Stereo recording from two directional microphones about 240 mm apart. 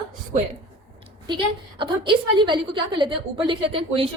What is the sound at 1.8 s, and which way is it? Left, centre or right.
A woman's voice, centre.